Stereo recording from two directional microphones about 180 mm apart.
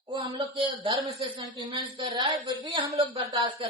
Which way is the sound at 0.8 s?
30° right (ahead or behind).